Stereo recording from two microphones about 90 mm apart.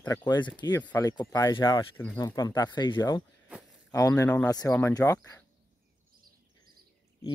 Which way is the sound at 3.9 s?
35° left (ahead or behind).